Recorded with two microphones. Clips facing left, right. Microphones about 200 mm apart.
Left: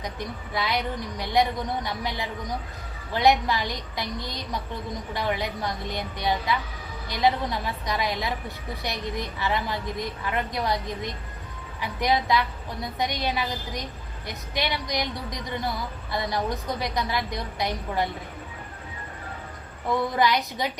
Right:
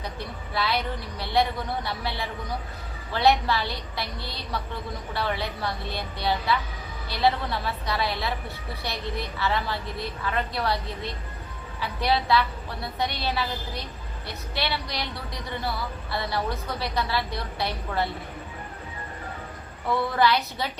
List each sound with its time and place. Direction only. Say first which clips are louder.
0.0 s a woman's voice: left 2 dB; 15° left (ahead or behind)
19.9 s a woman's voice: even; 15° left (ahead or behind)